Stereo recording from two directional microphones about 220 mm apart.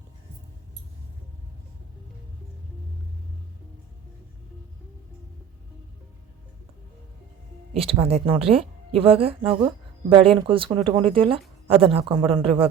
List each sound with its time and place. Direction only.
7.7 s speech: 25° right (ahead or behind)